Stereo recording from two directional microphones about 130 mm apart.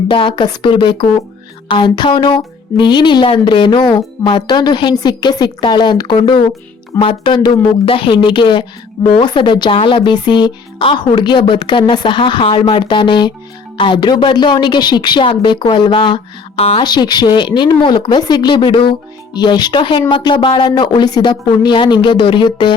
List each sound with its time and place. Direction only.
0.1 s a woman's voice: 40° left (ahead or behind)
16.8 s a woman's voice: 35° left (ahead or behind)